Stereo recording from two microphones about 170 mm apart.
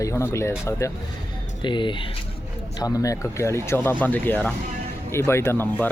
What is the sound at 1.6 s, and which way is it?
Speech, 30° left (ahead or behind).